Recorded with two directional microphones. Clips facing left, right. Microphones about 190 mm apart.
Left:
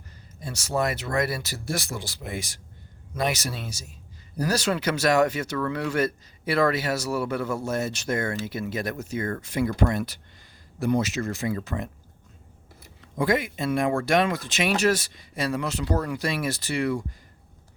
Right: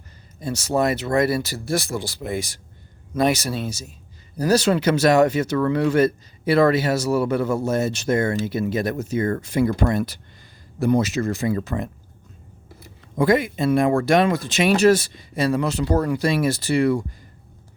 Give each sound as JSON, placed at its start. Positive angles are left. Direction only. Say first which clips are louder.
{"t": 0.3, "sound": "speech", "louder": "right 5 dB", "side_deg": -25}
{"t": 13.1, "sound": "speech", "louder": "right 6 dB", "side_deg": -35}